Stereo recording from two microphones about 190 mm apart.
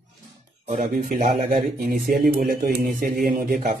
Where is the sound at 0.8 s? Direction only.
50° right (ahead or behind).